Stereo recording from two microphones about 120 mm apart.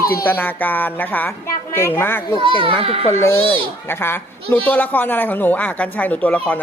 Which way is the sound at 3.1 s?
25° left (ahead or behind).